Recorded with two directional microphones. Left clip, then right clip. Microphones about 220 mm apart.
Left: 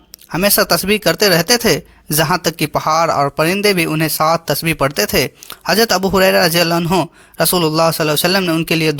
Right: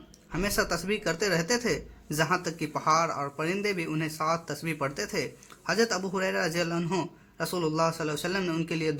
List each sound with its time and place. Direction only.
0.3 s speech: 45° left (ahead or behind)